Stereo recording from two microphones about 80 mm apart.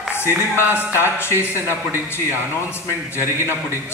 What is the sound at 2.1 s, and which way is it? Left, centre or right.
Speech, left.